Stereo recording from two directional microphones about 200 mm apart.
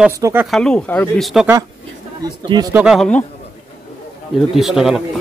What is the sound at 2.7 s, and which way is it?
Speech, 5° right (ahead or behind).